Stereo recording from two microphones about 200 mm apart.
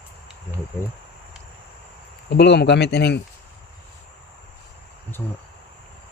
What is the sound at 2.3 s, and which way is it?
Speech, 55° left (ahead or behind).